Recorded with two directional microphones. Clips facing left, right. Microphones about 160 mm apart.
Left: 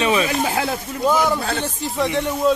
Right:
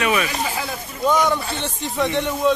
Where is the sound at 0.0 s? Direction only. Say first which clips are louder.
Left 2 dB; 25° left (ahead or behind).